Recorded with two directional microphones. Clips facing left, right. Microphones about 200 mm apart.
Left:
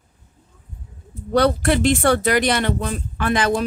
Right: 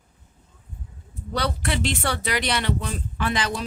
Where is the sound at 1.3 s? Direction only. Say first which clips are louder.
Left 10 dB; 50° left (ahead or behind).